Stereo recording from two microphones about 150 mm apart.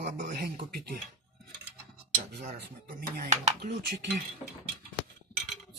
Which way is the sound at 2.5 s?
85° right.